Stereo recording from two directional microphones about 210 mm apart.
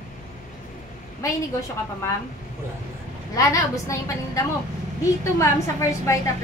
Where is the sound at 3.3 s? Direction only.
15° left (ahead or behind).